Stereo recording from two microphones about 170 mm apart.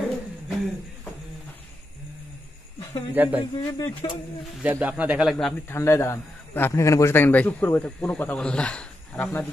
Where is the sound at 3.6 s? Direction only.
15° left (ahead or behind).